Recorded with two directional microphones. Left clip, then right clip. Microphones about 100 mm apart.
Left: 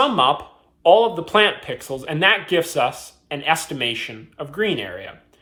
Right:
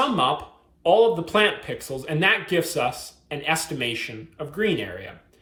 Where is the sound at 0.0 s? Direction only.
20° left (ahead or behind).